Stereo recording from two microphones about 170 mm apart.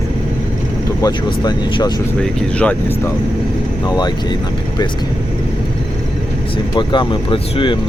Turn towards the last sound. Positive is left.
turn(degrees=30)  # may be behind; listen again after turning